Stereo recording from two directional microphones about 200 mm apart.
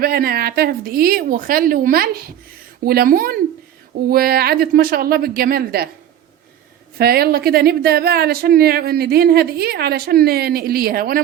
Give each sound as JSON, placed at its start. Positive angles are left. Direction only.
{"t": 0.0, "sound": "speech", "side_deg": -50}
{"t": 7.0, "sound": "speech", "side_deg": -50}